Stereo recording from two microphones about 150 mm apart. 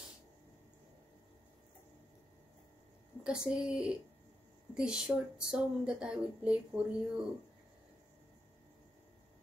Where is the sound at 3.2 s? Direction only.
5° right (ahead or behind).